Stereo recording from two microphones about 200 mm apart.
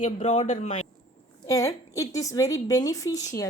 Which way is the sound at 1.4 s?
15° left (ahead or behind).